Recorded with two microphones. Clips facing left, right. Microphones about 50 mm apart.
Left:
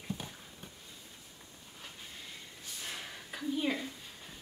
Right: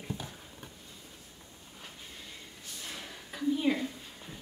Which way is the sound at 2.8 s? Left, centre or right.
Centre.